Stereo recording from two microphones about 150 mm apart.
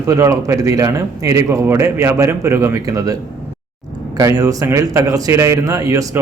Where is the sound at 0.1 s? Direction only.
20° right (ahead or behind).